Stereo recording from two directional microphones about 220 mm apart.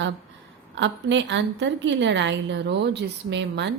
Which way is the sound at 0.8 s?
55° right (ahead or behind).